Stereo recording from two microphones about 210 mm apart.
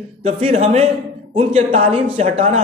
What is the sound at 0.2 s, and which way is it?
A man's voice, 30° right (ahead or behind).